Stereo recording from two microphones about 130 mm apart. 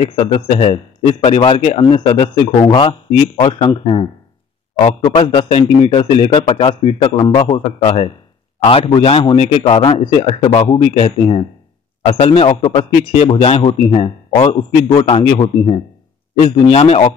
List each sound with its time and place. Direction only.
0.0 s a man's voice: 45° left (ahead or behind)